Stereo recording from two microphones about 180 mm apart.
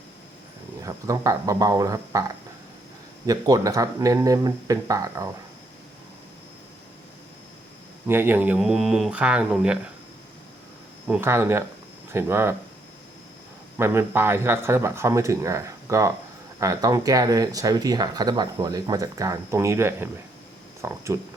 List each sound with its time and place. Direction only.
0.8 s speech: 20° right (ahead or behind)
3.2 s speech: 20° right (ahead or behind)
8.0 s speech: 10° right (ahead or behind)
11.1 s speech: 15° right (ahead or behind)
13.7 s speech: 15° right (ahead or behind)